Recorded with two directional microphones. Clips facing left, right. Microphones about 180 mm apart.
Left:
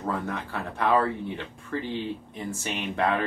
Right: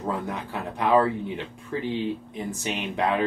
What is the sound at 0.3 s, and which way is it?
Speech, 15° right (ahead or behind).